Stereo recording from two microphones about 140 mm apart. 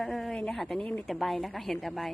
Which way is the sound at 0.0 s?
Centre (ahead or behind).